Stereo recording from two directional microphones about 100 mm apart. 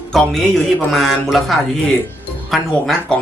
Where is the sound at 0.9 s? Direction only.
Centre (ahead or behind).